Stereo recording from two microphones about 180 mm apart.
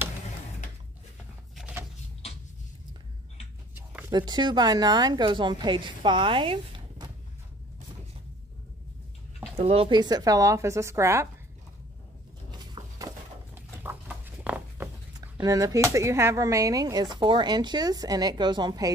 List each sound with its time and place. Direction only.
1.5 s a sound: centre (ahead or behind)
4.1 s speech: 25° right (ahead or behind)
9.6 s speech: 35° right (ahead or behind); by 11.2 s 15° right (ahead or behind)
12.4 s a sound: 25° right (ahead or behind)
13.6 s patter: 10° right (ahead or behind)
15.1 s speech: 20° right (ahead or behind)